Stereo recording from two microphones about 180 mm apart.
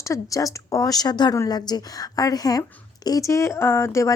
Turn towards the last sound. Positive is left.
turn(degrees=15)  # may be behind; listen again after turning